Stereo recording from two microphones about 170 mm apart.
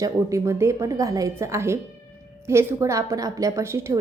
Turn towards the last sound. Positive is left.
turn(degrees=-20)  # may be behind; listen again after turning